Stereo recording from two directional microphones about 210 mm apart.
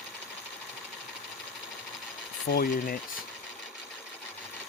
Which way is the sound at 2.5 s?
45° left (ahead or behind).